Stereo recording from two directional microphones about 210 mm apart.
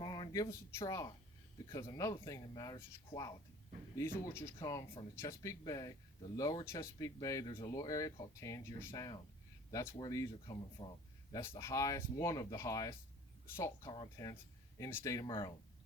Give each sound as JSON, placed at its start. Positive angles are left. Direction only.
{"t": 0.0, "sound": "speech", "side_deg": 20}